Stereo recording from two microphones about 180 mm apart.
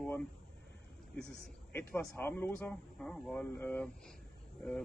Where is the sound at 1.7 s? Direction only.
10° left (ahead or behind).